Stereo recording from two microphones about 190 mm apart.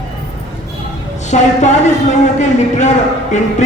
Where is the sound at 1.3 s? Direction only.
40° left (ahead or behind).